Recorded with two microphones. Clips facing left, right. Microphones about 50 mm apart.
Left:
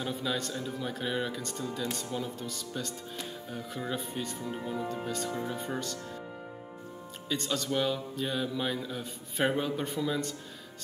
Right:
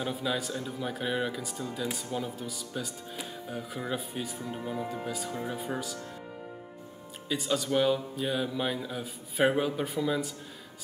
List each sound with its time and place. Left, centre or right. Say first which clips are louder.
0.0 s speech: right 1 dB; centre
7.2 s speech: right 2 dB; centre